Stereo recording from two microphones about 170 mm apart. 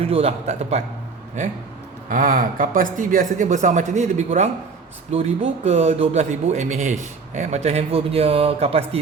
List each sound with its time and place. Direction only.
0.0 s speech: 35° right (ahead or behind)
2.0 s speech: 55° right (ahead or behind); by 9.0 s 35° right (ahead or behind)